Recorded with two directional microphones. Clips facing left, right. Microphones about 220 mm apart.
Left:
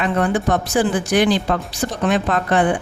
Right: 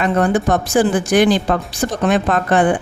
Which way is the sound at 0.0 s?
45° right (ahead or behind).